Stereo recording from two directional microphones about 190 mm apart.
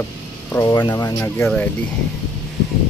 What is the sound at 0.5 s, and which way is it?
Speech, 15° left (ahead or behind).